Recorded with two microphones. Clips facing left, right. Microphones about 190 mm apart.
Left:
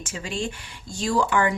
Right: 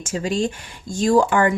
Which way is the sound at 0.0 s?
45° right (ahead or behind).